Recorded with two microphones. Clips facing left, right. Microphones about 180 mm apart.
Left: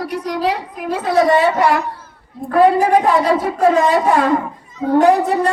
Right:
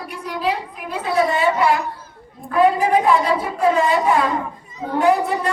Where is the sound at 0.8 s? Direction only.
45° left (ahead or behind).